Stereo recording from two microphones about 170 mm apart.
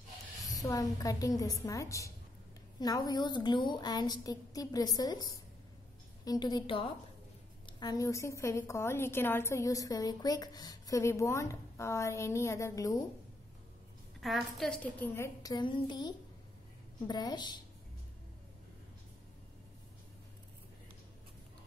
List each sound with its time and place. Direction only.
0.5 s a woman's voice: 20° left (ahead or behind)
14.2 s a woman's voice: centre (ahead or behind); by 17.6 s 25° left (ahead or behind)